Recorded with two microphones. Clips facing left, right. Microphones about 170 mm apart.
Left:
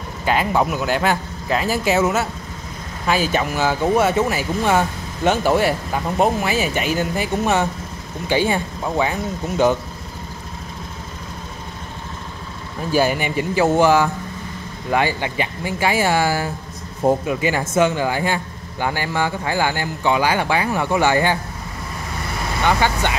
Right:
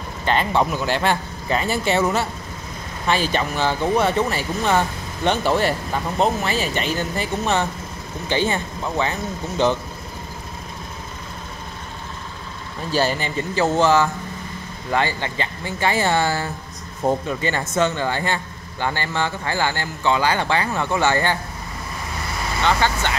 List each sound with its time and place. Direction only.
0.2 s a man's voice: 5° left (ahead or behind)
12.9 s speech: 10° left (ahead or behind)
22.6 s speech: 15° left (ahead or behind)